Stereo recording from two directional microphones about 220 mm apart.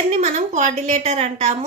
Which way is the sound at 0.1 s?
30° right (ahead or behind).